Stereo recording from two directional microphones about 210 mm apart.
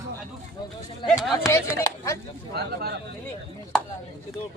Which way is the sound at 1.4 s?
15° left (ahead or behind).